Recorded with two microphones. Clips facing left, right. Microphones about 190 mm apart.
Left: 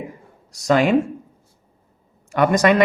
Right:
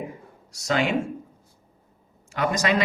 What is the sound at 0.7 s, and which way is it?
Speech, 55° left (ahead or behind).